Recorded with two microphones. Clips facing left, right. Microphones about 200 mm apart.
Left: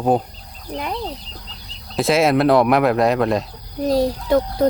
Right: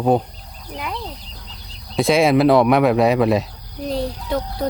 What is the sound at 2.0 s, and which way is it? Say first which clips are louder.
Speech: right 1 dB; centre (ahead or behind).